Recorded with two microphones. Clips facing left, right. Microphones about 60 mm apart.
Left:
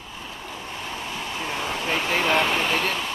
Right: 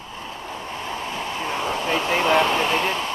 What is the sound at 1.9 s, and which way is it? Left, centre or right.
Speech, right.